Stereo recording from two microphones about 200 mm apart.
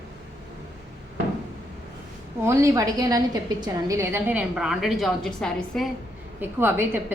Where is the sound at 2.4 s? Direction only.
15° right (ahead or behind); by 5.8 s centre (ahead or behind).